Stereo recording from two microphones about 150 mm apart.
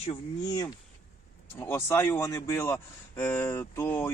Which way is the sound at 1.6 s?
15° left (ahead or behind).